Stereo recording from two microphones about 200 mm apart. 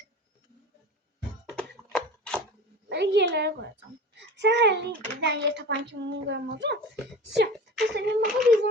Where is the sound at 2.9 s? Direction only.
60° right (ahead or behind).